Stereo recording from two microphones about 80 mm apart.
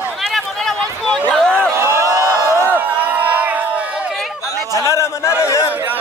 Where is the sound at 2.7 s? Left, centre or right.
Right.